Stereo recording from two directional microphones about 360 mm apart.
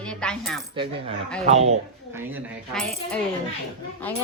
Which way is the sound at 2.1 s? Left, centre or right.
Centre.